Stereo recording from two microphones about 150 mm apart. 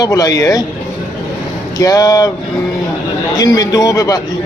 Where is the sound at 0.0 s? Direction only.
25° left (ahead or behind).